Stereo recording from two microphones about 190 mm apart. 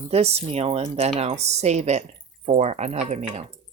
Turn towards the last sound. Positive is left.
turn(degrees=-35)  # may be behind; listen again after turning